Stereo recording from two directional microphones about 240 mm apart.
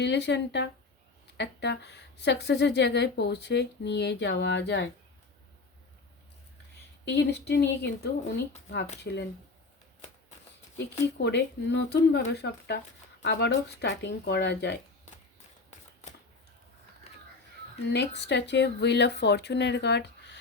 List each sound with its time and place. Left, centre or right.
0.0 s a woman's voice: left
7.0 s a woman's voice: left
11.2 s a woman's voice: left
17.1 s a sound: left
17.8 s a woman's voice: left